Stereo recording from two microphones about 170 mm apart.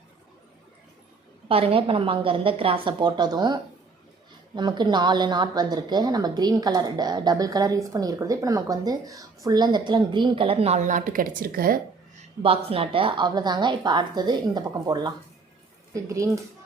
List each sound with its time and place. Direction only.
1.5 s a woman's voice: 35° right (ahead or behind); by 11.8 s 60° right (ahead or behind)
12.4 s a woman's voice: 35° right (ahead or behind)